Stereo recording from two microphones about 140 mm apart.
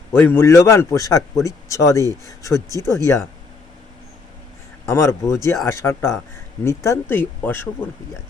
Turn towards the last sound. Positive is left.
turn(degrees=10)  # may be behind; listen again after turning